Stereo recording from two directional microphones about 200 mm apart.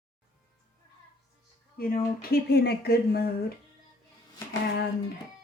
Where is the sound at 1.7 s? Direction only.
45° left (ahead or behind).